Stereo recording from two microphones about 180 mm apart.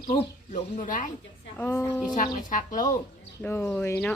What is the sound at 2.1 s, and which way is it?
Speech, 45° left (ahead or behind).